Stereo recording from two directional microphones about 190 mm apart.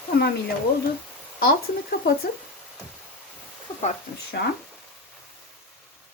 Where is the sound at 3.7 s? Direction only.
30° left (ahead or behind).